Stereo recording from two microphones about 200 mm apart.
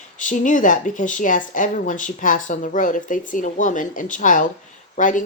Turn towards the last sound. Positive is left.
turn(degrees=40)  # may be behind; listen again after turning